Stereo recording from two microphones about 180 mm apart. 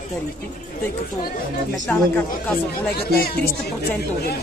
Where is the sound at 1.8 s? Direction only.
10° left (ahead or behind).